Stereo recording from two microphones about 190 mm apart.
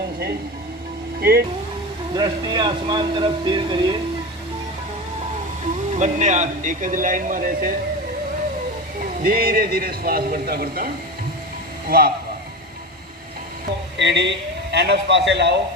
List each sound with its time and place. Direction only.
1.2 s a man's voice: 55° right (ahead or behind)
2.1 s speech: 20° right (ahead or behind)
5.9 s speech: 35° right (ahead or behind)
9.2 s a man's voice: 50° right (ahead or behind)
11.9 s a man's voice: 50° right (ahead or behind)
14.0 s a man's voice: 65° right (ahead or behind)